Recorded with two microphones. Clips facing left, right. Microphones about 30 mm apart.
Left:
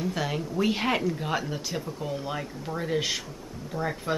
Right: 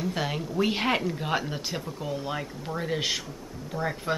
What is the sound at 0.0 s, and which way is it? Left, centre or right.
Speech, centre.